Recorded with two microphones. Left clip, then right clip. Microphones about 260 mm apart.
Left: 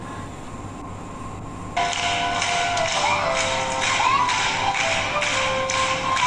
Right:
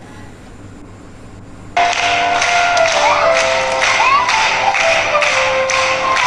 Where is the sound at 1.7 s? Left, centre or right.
Centre.